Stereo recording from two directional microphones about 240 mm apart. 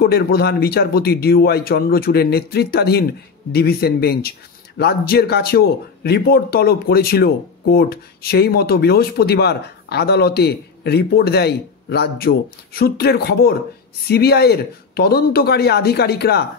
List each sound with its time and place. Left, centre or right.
0.0 s speech: left